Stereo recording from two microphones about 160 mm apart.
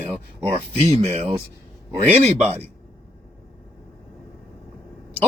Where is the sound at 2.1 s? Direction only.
40° right (ahead or behind).